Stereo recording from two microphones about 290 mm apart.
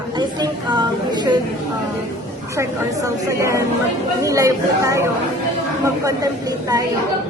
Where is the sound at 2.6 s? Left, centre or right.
Centre.